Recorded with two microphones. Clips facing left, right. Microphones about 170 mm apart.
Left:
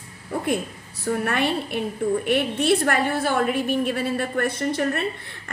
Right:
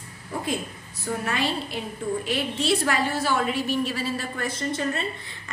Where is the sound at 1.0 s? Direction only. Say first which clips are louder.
Left 4 dB; 60° left (ahead or behind).